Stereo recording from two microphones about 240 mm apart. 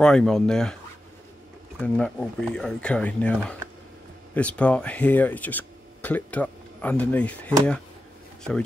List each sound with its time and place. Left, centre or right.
0.0 s speech: centre
1.8 s speech: centre